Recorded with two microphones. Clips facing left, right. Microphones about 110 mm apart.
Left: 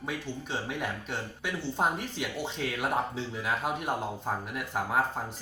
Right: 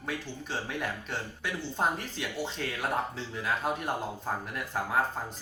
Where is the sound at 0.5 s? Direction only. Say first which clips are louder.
Even; 10° left (ahead or behind).